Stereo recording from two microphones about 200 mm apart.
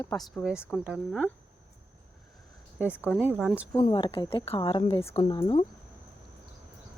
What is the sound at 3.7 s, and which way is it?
Speech, 20° left (ahead or behind).